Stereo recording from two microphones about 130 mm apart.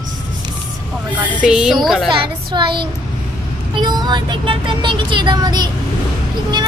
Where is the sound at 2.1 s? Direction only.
35° right (ahead or behind).